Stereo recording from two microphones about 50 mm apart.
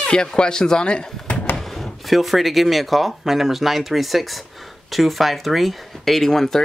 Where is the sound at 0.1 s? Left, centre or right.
Centre.